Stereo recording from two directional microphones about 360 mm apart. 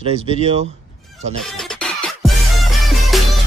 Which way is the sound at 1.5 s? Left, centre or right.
Centre.